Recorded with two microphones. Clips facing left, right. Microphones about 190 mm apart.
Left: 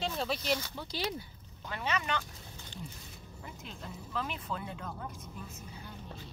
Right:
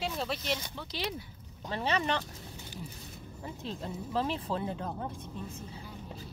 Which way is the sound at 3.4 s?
30° right (ahead or behind).